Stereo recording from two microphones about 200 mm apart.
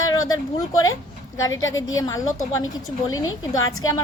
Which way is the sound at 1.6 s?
75° left (ahead or behind).